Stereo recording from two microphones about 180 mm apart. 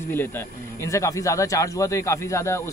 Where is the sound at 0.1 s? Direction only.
10° left (ahead or behind).